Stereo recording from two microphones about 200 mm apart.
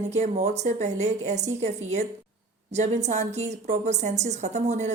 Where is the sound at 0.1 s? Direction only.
35° right (ahead or behind).